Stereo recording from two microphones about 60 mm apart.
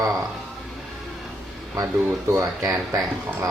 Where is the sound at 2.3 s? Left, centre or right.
Right.